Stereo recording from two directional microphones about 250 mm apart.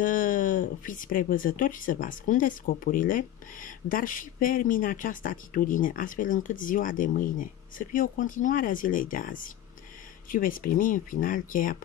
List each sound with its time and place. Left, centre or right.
0.0 s speech: left